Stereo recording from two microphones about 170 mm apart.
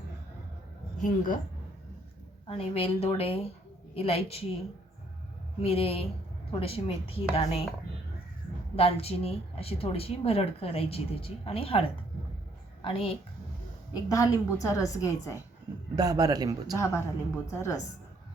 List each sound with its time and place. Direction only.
1.0 s speech: 50° left (ahead or behind)
2.5 s speech: 35° left (ahead or behind)
5.5 s speech: 35° left (ahead or behind)
8.7 s a woman's voice: 35° left (ahead or behind)
14.1 s a woman's voice: 20° left (ahead or behind)
16.0 s a man's voice: 20° right (ahead or behind)
16.7 s a woman's voice: 15° left (ahead or behind)